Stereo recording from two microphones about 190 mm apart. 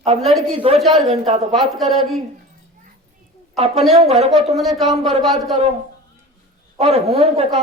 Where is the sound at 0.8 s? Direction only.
Centre (ahead or behind).